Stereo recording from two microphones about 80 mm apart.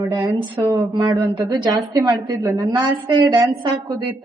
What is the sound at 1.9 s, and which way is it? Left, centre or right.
Speech, right.